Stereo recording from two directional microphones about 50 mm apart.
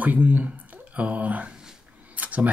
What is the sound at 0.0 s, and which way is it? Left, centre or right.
Speech, right.